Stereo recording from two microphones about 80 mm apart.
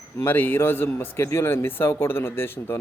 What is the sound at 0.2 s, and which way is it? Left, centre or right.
A man's voice, left.